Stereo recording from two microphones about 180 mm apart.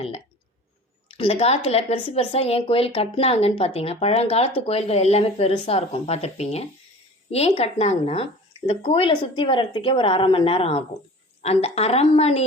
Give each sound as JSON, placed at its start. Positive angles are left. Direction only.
{"t": 1.0, "sound": "speech", "side_deg": 35}